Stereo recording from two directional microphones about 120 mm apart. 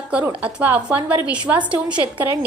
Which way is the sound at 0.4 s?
10° right (ahead or behind).